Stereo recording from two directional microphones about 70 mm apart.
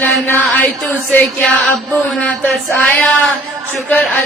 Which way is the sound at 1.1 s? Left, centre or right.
Centre.